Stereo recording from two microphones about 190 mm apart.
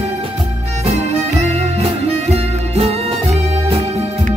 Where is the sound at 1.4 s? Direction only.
35° right (ahead or behind).